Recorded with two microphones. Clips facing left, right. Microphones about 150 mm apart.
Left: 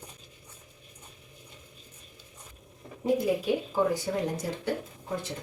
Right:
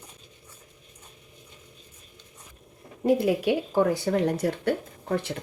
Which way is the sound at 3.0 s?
70° right (ahead or behind).